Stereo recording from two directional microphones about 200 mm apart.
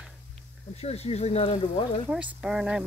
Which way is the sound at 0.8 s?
30° left (ahead or behind).